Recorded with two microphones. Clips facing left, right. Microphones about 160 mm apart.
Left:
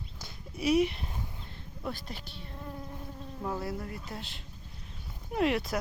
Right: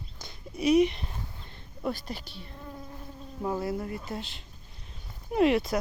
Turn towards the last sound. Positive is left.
turn(degrees=0)  # may be behind; listen again after turning